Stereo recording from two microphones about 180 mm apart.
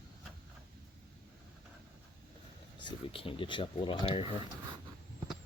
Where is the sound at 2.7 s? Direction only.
30° left (ahead or behind).